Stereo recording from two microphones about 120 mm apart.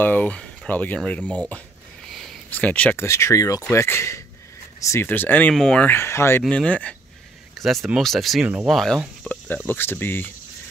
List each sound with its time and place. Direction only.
0.0 s speech: 15° left (ahead or behind)
2.0 s a sound: centre (ahead or behind)
2.5 s speech: 10° left (ahead or behind)
6.5 s speech: 10° left (ahead or behind)
9.2 s cricket: 10° left (ahead or behind)
9.7 s speech: 15° left (ahead or behind)